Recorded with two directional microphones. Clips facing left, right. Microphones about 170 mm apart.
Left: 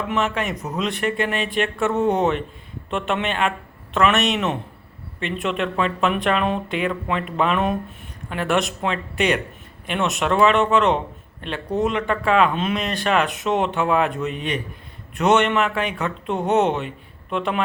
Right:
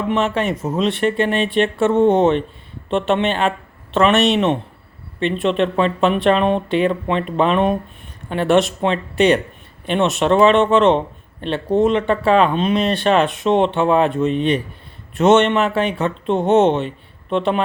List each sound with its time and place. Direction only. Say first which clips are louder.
0.1 s speech: right 5 dB; 30° right (ahead or behind)